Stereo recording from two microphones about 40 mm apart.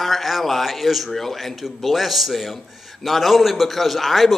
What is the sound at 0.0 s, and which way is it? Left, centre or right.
A man's voice, centre.